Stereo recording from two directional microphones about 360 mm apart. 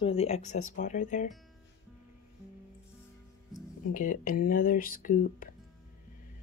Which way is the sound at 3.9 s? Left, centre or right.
Left.